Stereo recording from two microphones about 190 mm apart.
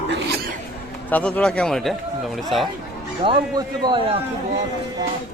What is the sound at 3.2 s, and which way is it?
Speech, 25° right (ahead or behind).